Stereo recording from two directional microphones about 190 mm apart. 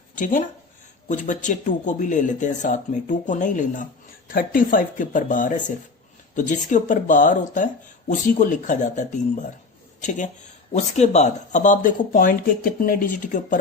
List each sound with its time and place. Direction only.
0.2 s speech: 45° left (ahead or behind)